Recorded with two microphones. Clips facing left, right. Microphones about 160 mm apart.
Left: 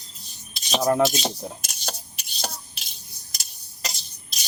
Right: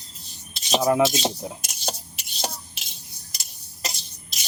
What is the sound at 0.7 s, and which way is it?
Speech, 5° right (ahead or behind).